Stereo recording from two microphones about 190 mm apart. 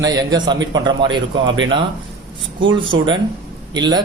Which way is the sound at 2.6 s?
25° right (ahead or behind).